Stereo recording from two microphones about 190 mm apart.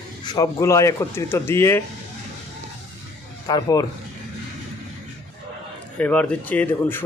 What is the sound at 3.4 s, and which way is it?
Speech, 20° left (ahead or behind).